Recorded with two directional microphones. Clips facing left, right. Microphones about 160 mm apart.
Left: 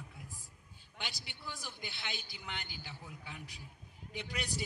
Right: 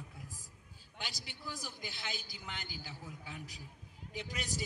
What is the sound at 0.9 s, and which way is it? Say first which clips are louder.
A man's voice: even; 40° right (ahead or behind).